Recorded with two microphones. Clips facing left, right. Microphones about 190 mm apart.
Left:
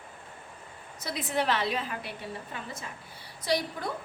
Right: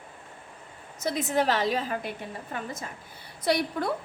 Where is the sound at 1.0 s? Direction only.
45° right (ahead or behind).